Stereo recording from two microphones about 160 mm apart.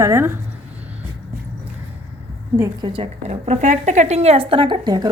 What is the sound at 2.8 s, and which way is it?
A woman's voice, 35° right (ahead or behind).